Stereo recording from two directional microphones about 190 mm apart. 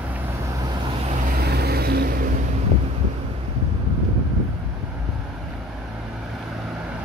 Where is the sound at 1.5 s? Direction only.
55° right (ahead or behind).